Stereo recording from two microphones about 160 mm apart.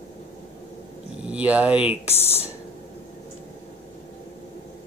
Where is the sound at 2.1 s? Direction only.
15° left (ahead or behind).